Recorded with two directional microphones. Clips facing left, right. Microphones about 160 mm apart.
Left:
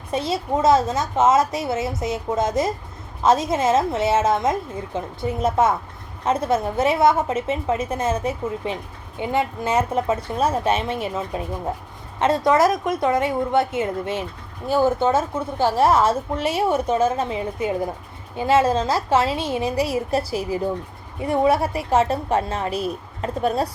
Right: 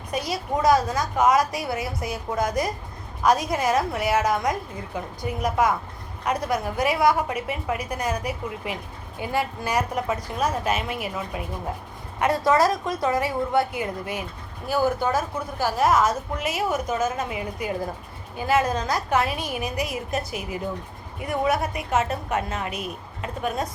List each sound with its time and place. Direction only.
0.1 s a woman's voice: 25° left (ahead or behind)